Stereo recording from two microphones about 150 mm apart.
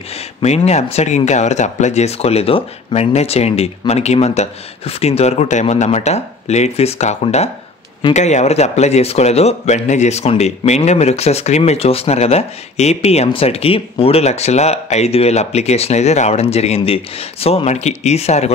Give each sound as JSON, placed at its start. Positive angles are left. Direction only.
{"t": 0.1, "sound": "speech", "side_deg": 45}